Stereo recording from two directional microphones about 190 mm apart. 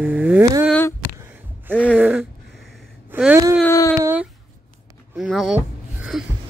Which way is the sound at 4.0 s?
10° right (ahead or behind).